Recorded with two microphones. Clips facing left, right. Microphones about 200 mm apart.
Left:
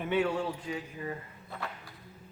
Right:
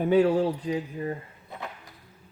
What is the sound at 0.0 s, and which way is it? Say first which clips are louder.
Speech: right 8 dB; 35° right (ahead or behind).